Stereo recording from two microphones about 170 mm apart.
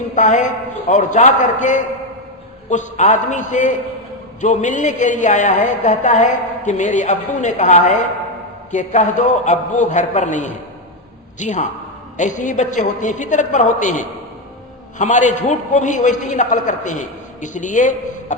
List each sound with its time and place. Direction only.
0.1 s a man's voice: 45° left (ahead or behind)